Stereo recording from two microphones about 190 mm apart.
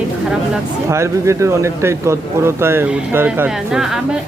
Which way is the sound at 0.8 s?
15° right (ahead or behind).